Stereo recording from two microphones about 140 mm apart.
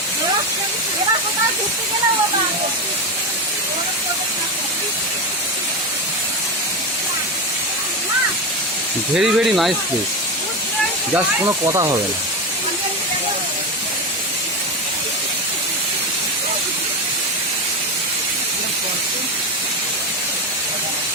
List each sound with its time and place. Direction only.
9.1 s speech: 5° right (ahead or behind)
11.4 s speech: 25° right (ahead or behind)